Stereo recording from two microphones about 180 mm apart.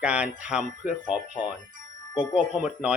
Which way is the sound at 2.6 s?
5° right (ahead or behind).